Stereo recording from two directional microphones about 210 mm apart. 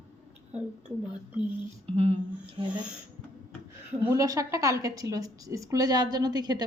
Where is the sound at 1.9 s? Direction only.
30° right (ahead or behind).